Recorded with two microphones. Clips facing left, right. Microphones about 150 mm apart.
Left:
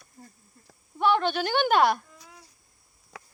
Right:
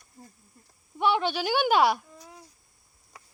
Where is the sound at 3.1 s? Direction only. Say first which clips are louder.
Left 6 dB; 80° left.